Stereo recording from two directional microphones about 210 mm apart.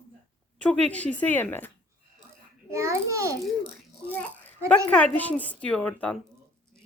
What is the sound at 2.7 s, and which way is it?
Child singing, 15° right (ahead or behind).